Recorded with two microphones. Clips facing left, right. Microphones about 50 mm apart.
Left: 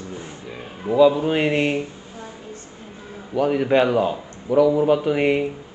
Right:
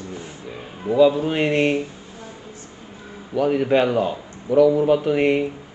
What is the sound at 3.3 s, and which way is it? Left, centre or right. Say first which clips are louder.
A man's voice: even; centre.